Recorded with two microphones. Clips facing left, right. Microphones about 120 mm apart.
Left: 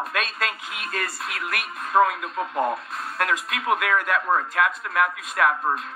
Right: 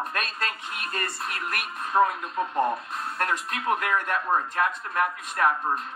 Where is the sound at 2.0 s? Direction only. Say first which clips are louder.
Left 3 dB; 90° left.